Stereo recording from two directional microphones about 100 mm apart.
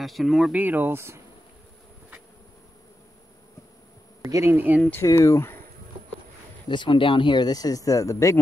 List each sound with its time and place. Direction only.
0.0 s speech: centre (ahead or behind)
0.5 s speech: 15° right (ahead or behind)
4.2 s speech: 30° right (ahead or behind)
5.0 s speech: 30° left (ahead or behind)
6.7 s speech: 55° left (ahead or behind); by 8.4 s 30° left (ahead or behind)